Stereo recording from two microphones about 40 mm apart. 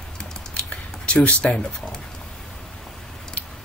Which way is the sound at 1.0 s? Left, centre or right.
Left.